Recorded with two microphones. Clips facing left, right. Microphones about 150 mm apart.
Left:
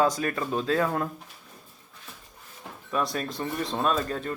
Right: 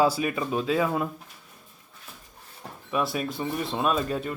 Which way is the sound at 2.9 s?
10° right (ahead or behind).